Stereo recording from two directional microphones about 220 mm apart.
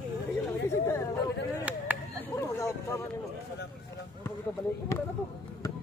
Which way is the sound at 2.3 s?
15° left (ahead or behind).